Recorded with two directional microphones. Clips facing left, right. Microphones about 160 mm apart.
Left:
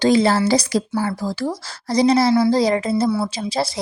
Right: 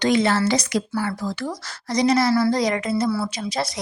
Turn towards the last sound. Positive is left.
turn(degrees=30)  # may be behind; listen again after turning